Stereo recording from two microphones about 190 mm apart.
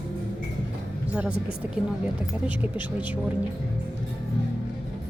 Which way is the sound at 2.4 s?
10° right (ahead or behind).